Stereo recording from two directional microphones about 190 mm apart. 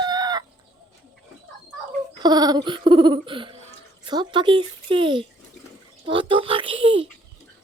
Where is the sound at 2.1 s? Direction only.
20° right (ahead or behind).